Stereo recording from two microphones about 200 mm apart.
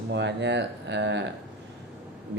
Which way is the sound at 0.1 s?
60° right (ahead or behind).